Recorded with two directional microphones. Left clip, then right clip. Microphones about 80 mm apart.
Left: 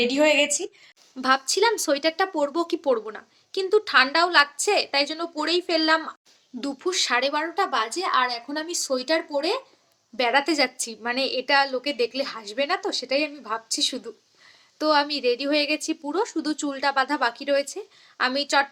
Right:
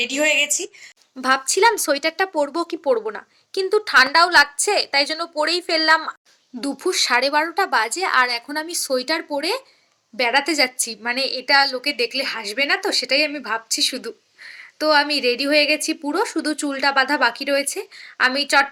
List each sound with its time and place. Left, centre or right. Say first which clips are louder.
0.0 s a woman's voice: right 1 dB; centre
1.2 s a woman's voice: right 4 dB; right
8.2 s a woman's voice: right 6 dB; left
8.8 s a woman's voice: right 2 dB; right